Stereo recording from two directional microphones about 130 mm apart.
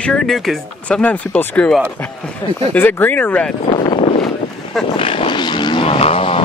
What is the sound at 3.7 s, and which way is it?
Speech, 45° left (ahead or behind).